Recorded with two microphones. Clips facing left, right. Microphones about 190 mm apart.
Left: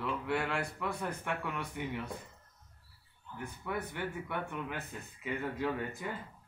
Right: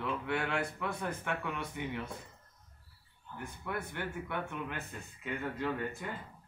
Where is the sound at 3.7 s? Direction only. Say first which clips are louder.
Left 1 dB; 10° left (ahead or behind).